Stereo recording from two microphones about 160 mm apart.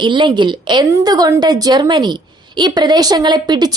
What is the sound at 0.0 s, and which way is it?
A woman's voice, 30° right (ahead or behind).